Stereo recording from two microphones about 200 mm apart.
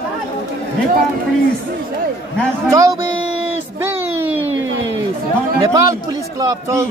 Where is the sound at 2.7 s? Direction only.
15° right (ahead or behind).